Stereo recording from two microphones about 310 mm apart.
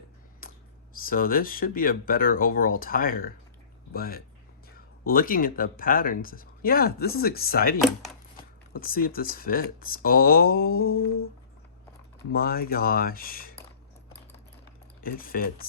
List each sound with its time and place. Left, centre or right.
0.4 s a sound: left
1.0 s speech: left
12.3 s speech: left
15.0 s speech: left